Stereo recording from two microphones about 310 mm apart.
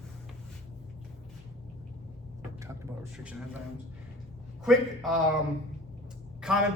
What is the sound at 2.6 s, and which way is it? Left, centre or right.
Speech, centre.